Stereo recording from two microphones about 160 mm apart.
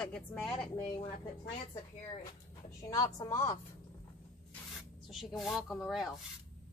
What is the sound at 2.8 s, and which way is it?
Speech, 20° left (ahead or behind).